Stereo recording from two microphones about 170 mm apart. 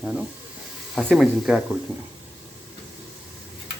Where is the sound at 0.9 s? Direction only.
Centre (ahead or behind).